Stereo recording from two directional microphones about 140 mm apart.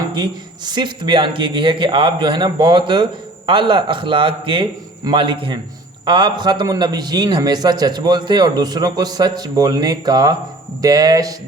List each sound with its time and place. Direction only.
0.1 s a man's voice: 30° right (ahead or behind)